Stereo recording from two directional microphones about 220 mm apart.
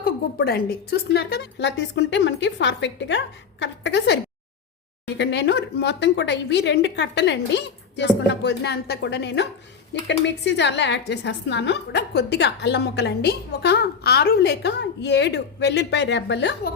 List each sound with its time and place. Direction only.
0.0 s a woman's voice: 45° left (ahead or behind)